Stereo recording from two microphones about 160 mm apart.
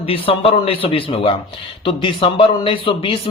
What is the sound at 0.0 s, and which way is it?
Speech, 35° left (ahead or behind).